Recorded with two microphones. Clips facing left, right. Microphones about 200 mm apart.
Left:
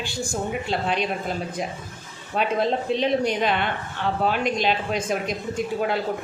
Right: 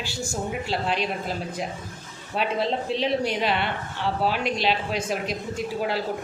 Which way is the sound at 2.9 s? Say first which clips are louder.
Left 3 dB; 50° left (ahead or behind).